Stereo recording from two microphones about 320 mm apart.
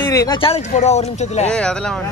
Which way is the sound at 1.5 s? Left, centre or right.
Centre.